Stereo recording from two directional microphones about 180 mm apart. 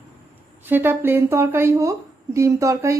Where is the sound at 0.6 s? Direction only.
10° right (ahead or behind).